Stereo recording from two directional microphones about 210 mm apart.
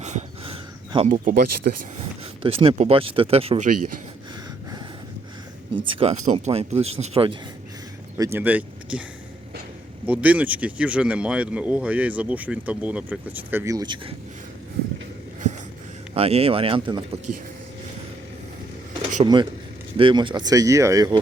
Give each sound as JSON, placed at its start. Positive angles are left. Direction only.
{"t": 0.0, "sound": "a sound", "side_deg": -35}
{"t": 1.7, "sound": "speech", "side_deg": -45}
{"t": 2.4, "sound": "speech", "side_deg": -25}
{"t": 5.7, "sound": "speech", "side_deg": -25}
{"t": 8.2, "sound": "speech", "side_deg": -10}
{"t": 10.1, "sound": "speech", "side_deg": -5}
{"t": 16.1, "sound": "speech", "side_deg": -30}
{"t": 19.2, "sound": "speech", "side_deg": -20}